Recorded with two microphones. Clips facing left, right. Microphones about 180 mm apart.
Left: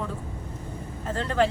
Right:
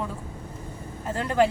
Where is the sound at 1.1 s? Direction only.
10° right (ahead or behind).